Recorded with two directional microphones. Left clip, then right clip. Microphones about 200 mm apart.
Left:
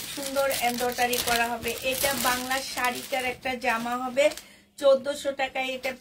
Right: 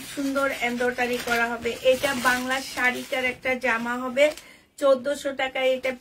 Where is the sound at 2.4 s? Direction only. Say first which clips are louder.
Right 3 dB; 20° right (ahead or behind).